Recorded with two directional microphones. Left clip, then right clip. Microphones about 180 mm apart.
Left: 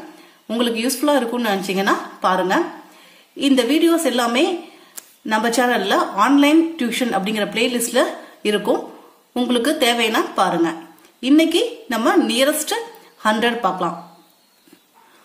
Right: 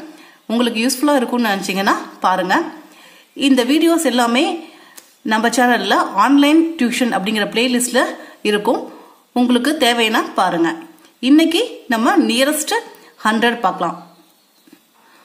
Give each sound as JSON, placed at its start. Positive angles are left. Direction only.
{"t": 0.5, "sound": "a woman's voice", "side_deg": -25}